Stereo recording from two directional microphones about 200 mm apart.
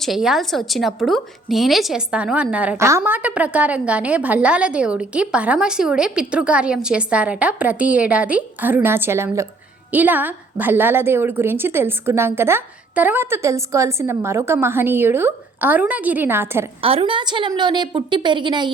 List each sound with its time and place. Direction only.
0.0 s a woman's voice: centre (ahead or behind)
16.8 s a woman's voice: 30° right (ahead or behind)